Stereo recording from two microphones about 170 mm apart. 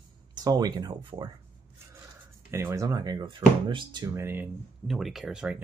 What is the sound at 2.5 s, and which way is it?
Speech, 15° right (ahead or behind).